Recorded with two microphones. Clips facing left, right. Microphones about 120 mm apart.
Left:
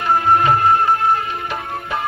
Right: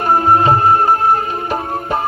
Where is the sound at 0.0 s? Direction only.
35° right (ahead or behind).